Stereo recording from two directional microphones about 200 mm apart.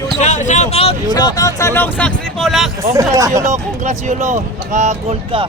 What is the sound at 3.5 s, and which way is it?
Speech, 35° right (ahead or behind).